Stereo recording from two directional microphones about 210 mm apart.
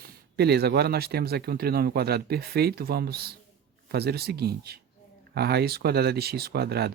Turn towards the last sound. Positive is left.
turn(degrees=-50)  # may be behind; listen again after turning